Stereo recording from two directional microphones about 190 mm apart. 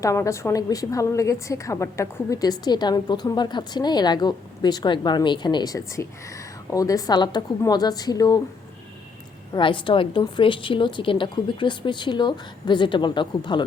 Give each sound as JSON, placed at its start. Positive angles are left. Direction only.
{"t": 0.0, "sound": "a woman's voice", "side_deg": 15}
{"t": 9.5, "sound": "a woman's voice", "side_deg": 25}